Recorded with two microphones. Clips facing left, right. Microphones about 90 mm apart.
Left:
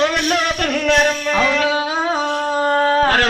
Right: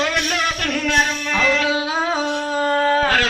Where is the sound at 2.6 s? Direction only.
40° left (ahead or behind).